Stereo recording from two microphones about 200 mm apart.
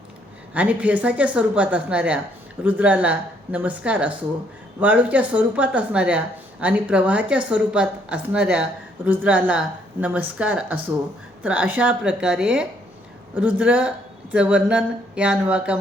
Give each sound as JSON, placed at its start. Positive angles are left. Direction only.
{"t": 0.5, "sound": "a woman's voice", "side_deg": -5}